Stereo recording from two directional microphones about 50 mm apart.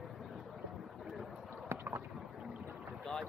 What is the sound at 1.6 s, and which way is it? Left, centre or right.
Boat, right.